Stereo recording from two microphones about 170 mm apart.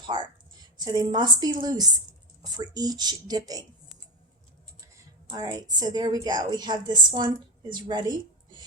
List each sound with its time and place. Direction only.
0.0 s a sound: 25° right (ahead or behind)
0.8 s a woman's voice: 25° right (ahead or behind)
5.3 s a woman's voice: 25° right (ahead or behind)